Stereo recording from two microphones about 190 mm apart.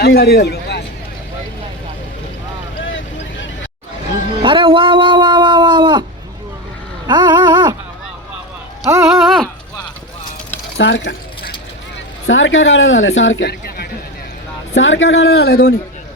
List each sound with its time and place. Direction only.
0.0 s a man's voice: 55° left (ahead or behind)
2.7 s vehicle: 85° left
4.4 s cat: 25° right (ahead or behind)
7.1 s dog: 25° right (ahead or behind)
8.9 s a sound: 15° right (ahead or behind)
9.2 s a sound: centre (ahead or behind)
10.8 s a sound: 70° left (ahead or behind)
12.3 s speech: 90° left; by 13.8 s 55° left (ahead or behind)
14.8 s speech: 90° left; by 15.7 s 55° left (ahead or behind)